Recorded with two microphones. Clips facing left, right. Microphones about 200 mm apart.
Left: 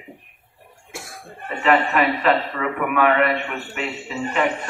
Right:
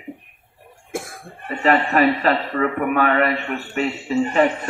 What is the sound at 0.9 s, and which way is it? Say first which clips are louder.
Cough: right 8 dB; 55° right (ahead or behind).